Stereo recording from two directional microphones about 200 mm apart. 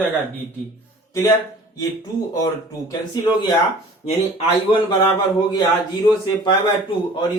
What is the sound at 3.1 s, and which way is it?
A man's voice, 20° left (ahead or behind).